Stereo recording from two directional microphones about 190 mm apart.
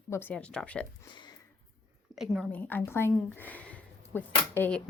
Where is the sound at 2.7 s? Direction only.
10° left (ahead or behind).